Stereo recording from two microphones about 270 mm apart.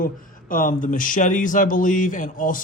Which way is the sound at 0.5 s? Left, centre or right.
Left.